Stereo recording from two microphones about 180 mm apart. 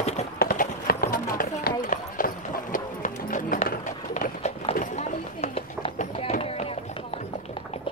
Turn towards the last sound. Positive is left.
turn(degrees=35)  # may be behind; listen again after turning